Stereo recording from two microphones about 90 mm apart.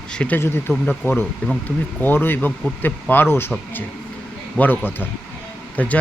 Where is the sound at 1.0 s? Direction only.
25° left (ahead or behind).